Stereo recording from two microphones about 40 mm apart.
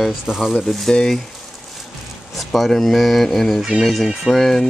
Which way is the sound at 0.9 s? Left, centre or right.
Centre.